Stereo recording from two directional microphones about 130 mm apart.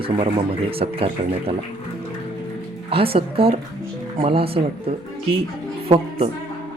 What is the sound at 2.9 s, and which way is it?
A woman's voice, 45° right (ahead or behind).